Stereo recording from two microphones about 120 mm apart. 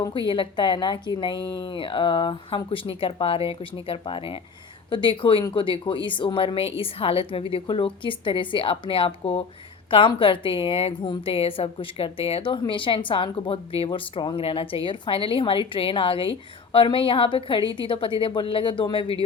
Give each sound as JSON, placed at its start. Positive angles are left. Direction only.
{"t": 0.1, "sound": "a woman's voice", "side_deg": 45}